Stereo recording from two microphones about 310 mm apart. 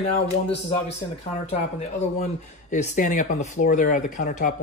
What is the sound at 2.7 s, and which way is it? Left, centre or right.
Speech, left.